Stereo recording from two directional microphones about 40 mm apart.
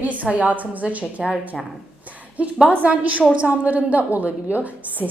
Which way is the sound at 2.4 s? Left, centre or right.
Right.